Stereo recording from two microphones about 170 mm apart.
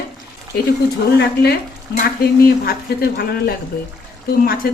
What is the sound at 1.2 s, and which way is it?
Speech, 70° left (ahead or behind).